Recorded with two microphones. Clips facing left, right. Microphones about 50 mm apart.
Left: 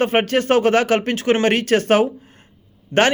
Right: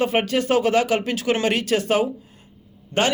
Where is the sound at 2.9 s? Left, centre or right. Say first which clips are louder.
Left 5 dB; left.